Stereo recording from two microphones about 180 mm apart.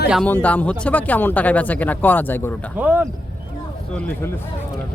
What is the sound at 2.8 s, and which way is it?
Speech, 10° right (ahead or behind).